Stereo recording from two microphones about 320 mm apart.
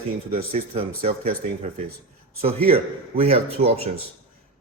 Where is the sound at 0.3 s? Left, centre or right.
Right.